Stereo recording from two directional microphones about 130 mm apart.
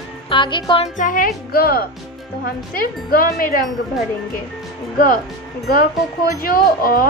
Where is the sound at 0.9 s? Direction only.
90° left.